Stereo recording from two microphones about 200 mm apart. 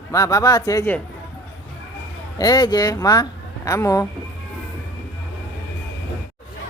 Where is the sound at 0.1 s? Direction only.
15° left (ahead or behind).